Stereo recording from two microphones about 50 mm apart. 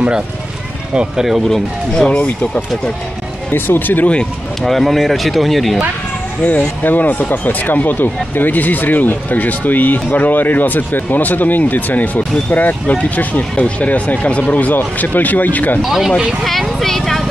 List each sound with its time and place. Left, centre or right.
1.5 s speech: centre
2.1 s speech: left
3.5 s speech: left
4.6 s speech: centre
6.4 s speech: left
15.8 s speech: centre